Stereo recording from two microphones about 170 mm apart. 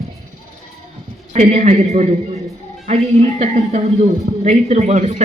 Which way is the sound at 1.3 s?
40° right (ahead or behind).